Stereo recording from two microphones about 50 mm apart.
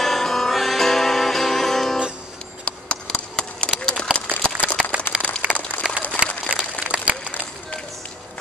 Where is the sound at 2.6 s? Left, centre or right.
Left.